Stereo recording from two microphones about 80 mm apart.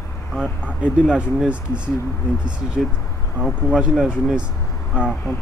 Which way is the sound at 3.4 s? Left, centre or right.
Centre.